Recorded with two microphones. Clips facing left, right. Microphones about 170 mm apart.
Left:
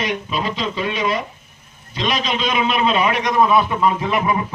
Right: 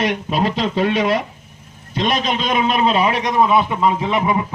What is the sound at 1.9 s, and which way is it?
A man's voice, 55° right (ahead or behind).